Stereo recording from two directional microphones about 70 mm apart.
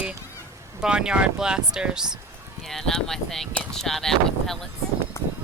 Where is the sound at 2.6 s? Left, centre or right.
Centre.